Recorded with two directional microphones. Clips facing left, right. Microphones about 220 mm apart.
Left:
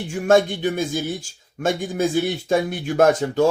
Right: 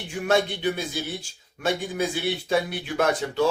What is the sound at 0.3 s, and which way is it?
Speech, 45° left (ahead or behind).